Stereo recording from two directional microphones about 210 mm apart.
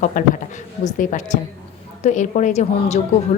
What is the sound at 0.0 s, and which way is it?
A woman's voice, 40° left (ahead or behind).